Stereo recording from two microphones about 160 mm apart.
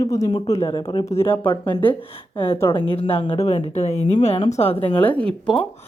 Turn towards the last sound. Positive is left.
turn(degrees=5)  # may be behind; listen again after turning